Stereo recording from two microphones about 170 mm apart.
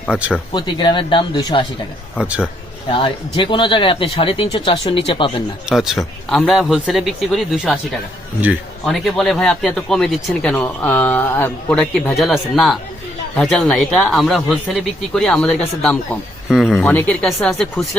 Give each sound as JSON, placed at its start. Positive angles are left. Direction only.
{"t": 0.1, "sound": "speech", "side_deg": -5}
{"t": 0.5, "sound": "speech", "side_deg": 25}
{"t": 2.1, "sound": "a man's voice", "side_deg": -5}
{"t": 2.9, "sound": "speech", "side_deg": 30}
{"t": 5.6, "sound": "speech", "side_deg": 0}